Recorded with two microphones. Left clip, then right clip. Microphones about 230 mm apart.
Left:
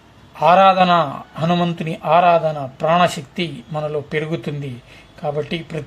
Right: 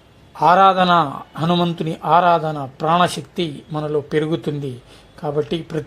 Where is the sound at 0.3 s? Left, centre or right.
Right.